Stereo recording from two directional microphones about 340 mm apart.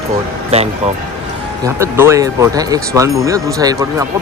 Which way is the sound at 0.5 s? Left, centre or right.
Centre.